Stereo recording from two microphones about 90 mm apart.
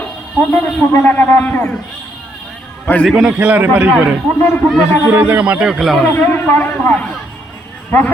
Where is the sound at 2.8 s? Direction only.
15° left (ahead or behind).